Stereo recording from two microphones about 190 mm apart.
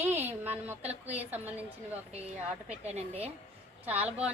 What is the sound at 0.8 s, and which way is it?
Speech, 35° right (ahead or behind).